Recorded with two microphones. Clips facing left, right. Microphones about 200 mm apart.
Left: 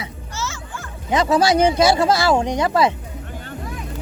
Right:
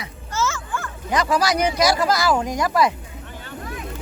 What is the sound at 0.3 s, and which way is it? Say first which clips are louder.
Music: right 6 dB; 50° right (ahead or behind).